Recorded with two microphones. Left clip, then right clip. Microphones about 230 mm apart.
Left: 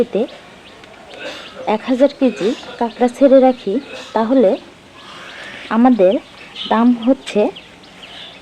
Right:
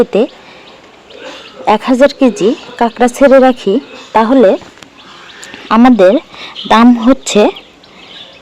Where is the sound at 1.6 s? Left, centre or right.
Right.